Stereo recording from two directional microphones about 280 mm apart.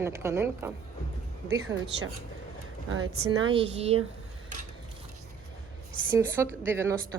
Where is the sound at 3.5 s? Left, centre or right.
Right.